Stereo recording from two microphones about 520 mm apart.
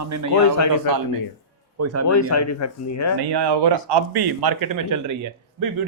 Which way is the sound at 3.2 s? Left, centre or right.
Right.